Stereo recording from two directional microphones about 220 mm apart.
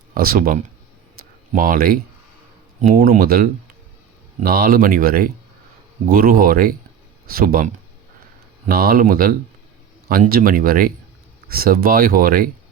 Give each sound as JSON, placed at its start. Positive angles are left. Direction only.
{"t": 0.1, "sound": "speech", "side_deg": -40}